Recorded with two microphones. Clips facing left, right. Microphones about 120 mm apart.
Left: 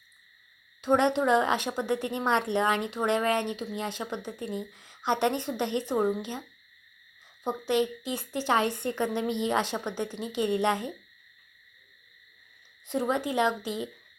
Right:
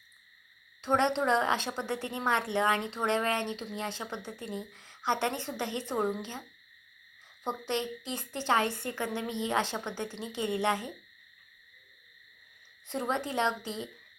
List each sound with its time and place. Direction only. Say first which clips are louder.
0.8 s a woman's voice: left 4 dB; 15° left (ahead or behind)
7.4 s a woman's voice: left 6 dB; 10° left (ahead or behind)
12.9 s a woman's voice: left 4 dB; 15° left (ahead or behind)